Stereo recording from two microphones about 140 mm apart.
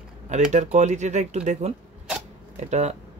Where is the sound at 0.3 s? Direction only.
60° right (ahead or behind).